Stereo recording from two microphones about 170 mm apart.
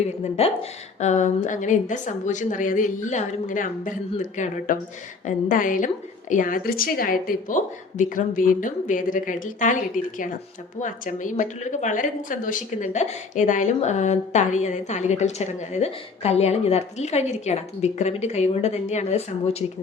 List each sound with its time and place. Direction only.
0.4 s a woman's voice: 40° left (ahead or behind)
10.8 s a woman's voice: 50° left (ahead or behind)